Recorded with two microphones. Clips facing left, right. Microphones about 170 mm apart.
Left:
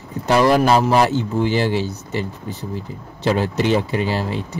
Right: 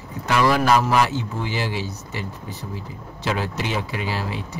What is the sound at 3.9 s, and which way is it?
Speech, 30° left (ahead or behind).